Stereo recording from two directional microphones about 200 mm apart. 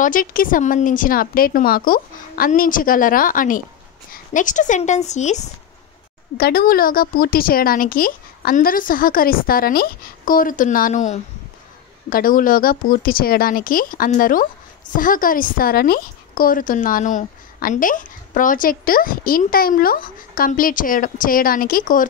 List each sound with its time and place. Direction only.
0.0 s a woman's voice: 45° left (ahead or behind)
6.3 s a woman's voice: 50° left (ahead or behind)